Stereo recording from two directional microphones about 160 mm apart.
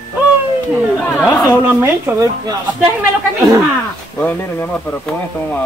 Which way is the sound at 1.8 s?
15° right (ahead or behind).